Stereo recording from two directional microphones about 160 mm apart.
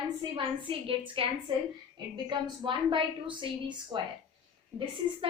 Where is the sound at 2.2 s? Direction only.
30° right (ahead or behind).